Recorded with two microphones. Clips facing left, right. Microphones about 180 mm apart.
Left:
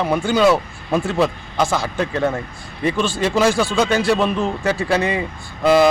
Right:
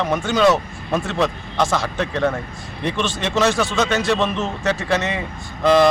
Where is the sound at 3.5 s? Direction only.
30° left (ahead or behind).